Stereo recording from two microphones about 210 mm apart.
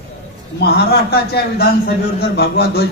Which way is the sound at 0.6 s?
50° left (ahead or behind).